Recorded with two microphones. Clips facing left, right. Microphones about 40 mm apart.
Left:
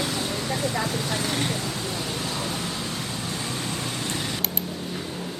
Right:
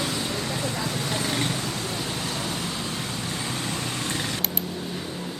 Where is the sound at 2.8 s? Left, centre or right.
Right.